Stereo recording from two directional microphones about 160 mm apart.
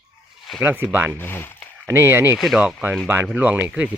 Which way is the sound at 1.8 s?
15° right (ahead or behind).